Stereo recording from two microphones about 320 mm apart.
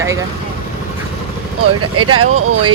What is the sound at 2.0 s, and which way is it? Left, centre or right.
Speech, right.